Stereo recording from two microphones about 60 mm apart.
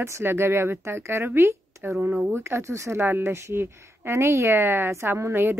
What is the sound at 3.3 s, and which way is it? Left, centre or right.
A woman's voice, right.